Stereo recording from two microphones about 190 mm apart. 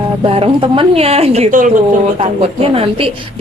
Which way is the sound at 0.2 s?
30° right (ahead or behind).